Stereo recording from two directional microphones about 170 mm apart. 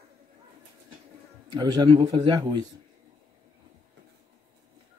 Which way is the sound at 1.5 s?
25° right (ahead or behind).